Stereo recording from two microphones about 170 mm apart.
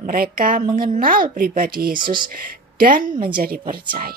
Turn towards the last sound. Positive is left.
turn(degrees=-60)  # may be behind; listen again after turning